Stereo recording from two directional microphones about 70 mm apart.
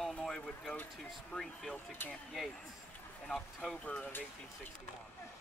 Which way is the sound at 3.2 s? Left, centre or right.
Centre.